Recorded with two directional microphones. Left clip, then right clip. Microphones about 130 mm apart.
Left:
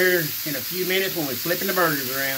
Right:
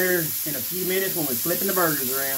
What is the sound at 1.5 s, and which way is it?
Speech, 20° left (ahead or behind).